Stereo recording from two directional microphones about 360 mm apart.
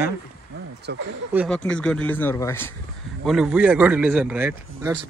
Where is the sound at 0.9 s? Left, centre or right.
Right.